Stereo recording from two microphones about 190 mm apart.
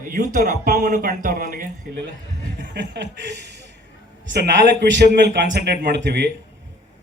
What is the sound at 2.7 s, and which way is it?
Speech, 65° right (ahead or behind).